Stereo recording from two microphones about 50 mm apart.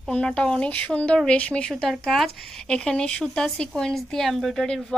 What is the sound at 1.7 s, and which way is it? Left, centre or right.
Speech, centre.